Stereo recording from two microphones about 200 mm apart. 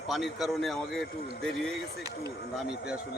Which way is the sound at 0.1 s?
Centre (ahead or behind).